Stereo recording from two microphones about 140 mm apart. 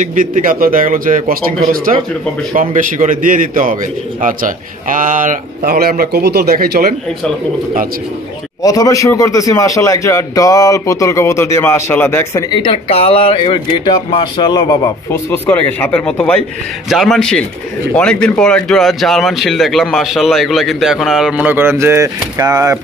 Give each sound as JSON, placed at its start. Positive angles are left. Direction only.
{"t": 0.0, "sound": "a man's voice", "side_deg": -70}
{"t": 1.9, "sound": "a man's voice", "side_deg": -65}
{"t": 8.6, "sound": "a man's voice", "side_deg": 25}
{"t": 15.3, "sound": "speech", "side_deg": 10}